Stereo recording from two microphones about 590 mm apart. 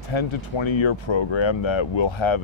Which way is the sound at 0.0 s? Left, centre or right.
Left.